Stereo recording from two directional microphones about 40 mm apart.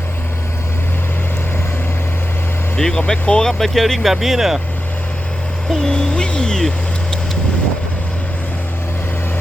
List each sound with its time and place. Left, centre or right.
2.7 s speech: centre
3.6 s speech: centre
5.8 s music: centre
6.6 s a sound: centre